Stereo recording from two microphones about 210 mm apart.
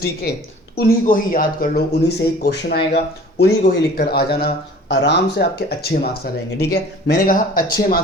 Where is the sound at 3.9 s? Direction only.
45° left (ahead or behind).